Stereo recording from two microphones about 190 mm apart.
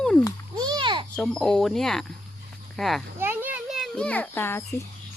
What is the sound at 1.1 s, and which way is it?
A child's voice, 5° left (ahead or behind).